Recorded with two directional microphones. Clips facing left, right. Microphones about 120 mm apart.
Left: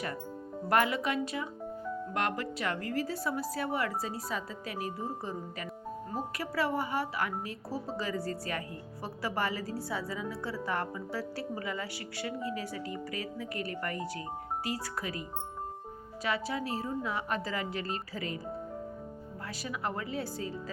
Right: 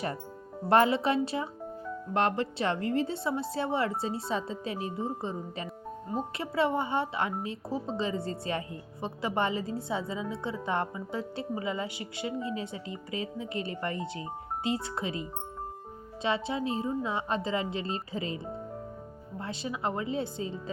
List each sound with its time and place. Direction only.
0.7 s a woman's voice: 30° right (ahead or behind)
16.2 s a woman's voice: 25° right (ahead or behind)
19.4 s a woman's voice: 25° right (ahead or behind)